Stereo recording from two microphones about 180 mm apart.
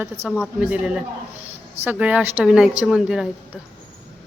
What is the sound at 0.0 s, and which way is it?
A woman's voice, 10° right (ahead or behind).